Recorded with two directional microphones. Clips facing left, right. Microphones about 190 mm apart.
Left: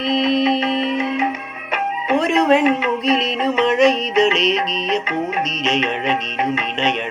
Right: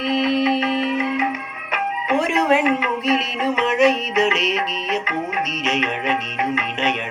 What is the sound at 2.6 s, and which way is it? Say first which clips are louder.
Music: left 3 dB; 25° left (ahead or behind).